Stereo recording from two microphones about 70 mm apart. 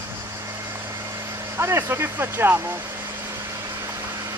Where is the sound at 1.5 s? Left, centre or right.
Right.